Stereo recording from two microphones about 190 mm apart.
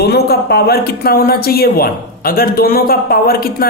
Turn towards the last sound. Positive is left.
turn(degrees=50)  # may be behind; listen again after turning